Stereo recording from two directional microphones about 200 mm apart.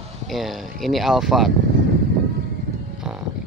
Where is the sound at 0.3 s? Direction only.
Centre (ahead or behind).